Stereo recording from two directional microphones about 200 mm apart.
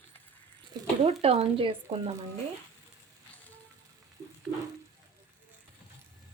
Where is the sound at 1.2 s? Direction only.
30° right (ahead or behind).